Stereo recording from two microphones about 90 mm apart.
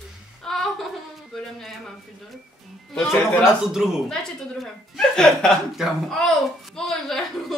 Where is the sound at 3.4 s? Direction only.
5° right (ahead or behind).